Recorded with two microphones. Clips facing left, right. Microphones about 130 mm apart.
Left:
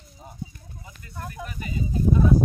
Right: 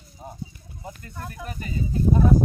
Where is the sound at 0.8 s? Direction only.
45° right (ahead or behind).